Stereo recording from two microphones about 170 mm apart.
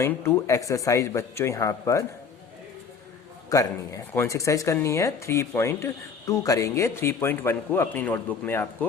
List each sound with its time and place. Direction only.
0.0 s speech: 15° left (ahead or behind)
3.5 s speech: 20° left (ahead or behind)